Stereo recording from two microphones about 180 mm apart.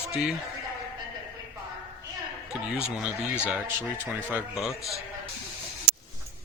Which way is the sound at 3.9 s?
10° right (ahead or behind).